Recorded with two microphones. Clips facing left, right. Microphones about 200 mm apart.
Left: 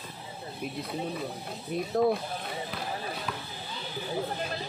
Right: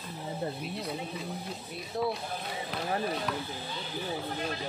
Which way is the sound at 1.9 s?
50° left (ahead or behind).